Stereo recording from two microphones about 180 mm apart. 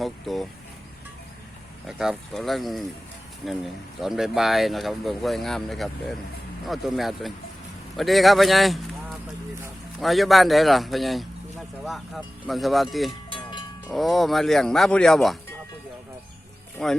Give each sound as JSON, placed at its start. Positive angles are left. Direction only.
{"t": 0.0, "sound": "speech", "side_deg": 0}
{"t": 1.9, "sound": "speech", "side_deg": -5}
{"t": 13.3, "sound": "cowbell", "side_deg": 25}
{"t": 13.9, "sound": "speech", "side_deg": 0}
{"t": 16.8, "sound": "speech", "side_deg": 0}